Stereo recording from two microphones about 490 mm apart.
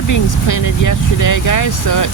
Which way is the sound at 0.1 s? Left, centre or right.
Left.